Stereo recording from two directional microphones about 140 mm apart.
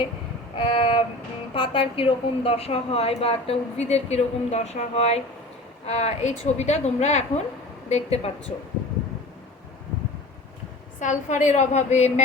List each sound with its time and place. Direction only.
0.5 s a sound: 35° left (ahead or behind)
1.5 s a woman's voice: 40° left (ahead or behind)
11.0 s a woman's voice: 60° left (ahead or behind)